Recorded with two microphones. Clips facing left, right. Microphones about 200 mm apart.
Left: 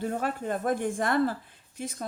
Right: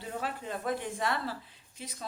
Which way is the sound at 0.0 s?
50° left (ahead or behind).